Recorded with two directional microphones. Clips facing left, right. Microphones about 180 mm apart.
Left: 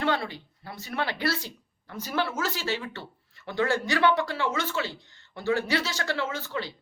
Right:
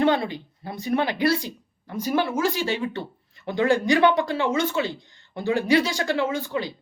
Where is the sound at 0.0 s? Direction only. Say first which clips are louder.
Right 7 dB; 20° right (ahead or behind).